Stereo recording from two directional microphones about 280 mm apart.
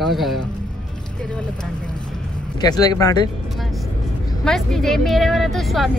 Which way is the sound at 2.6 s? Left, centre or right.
Centre.